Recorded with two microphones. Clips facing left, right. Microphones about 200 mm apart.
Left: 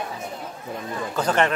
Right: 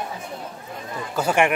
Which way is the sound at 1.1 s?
10° right (ahead or behind).